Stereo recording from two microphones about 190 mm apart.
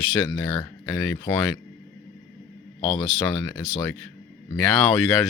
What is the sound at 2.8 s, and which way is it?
Speech, 30° left (ahead or behind).